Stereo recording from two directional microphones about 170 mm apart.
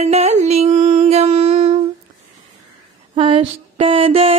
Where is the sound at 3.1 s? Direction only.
30° right (ahead or behind).